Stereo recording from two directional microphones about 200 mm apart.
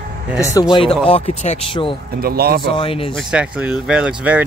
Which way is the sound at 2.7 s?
25° left (ahead or behind).